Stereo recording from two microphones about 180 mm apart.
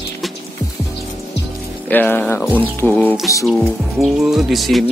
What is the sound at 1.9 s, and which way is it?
Speech, 10° left (ahead or behind).